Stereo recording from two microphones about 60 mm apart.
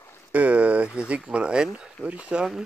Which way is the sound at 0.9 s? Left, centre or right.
Centre.